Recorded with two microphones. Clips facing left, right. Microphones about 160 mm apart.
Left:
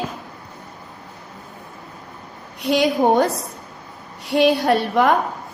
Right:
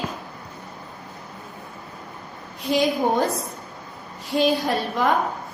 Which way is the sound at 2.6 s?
75° left (ahead or behind).